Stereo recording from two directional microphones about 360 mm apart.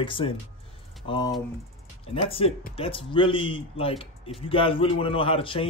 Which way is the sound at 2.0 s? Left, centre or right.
Centre.